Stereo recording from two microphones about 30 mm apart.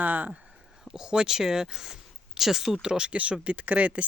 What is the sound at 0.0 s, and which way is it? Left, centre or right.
Speech, right.